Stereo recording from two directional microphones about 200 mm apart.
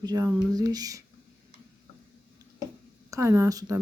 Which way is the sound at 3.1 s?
15° right (ahead or behind).